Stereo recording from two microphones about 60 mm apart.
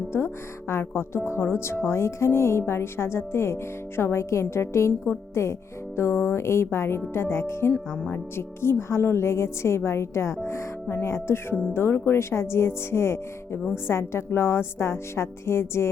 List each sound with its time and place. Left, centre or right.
0.7 s speech: left